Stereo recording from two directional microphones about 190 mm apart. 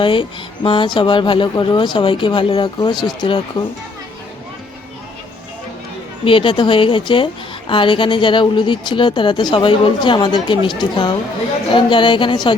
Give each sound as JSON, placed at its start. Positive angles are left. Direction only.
{"t": 0.0, "sound": "a woman's voice", "side_deg": 25}
{"t": 6.2, "sound": "a woman's voice", "side_deg": 25}